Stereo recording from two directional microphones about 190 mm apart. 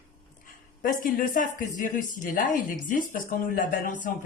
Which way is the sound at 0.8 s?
45° left (ahead or behind).